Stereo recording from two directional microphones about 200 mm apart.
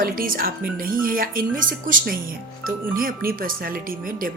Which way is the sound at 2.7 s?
45° right (ahead or behind).